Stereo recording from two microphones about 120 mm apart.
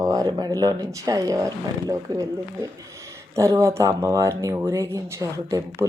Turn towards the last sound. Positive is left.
turn(degrees=-25)  # may be behind; listen again after turning